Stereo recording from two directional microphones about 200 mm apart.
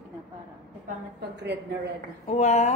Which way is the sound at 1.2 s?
55° right (ahead or behind).